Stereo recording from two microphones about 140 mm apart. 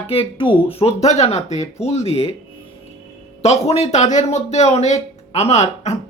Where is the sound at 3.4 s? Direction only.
50° left (ahead or behind).